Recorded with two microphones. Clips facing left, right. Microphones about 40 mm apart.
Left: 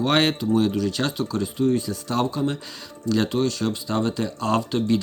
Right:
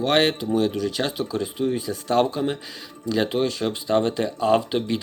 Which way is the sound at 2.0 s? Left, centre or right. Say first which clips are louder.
Right 4 dB; right.